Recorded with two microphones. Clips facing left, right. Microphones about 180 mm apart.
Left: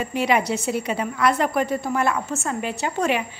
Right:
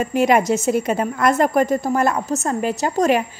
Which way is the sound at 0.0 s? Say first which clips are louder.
Right 5 dB; 45° right (ahead or behind).